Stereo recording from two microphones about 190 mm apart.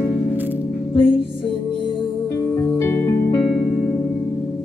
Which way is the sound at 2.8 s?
15° left (ahead or behind).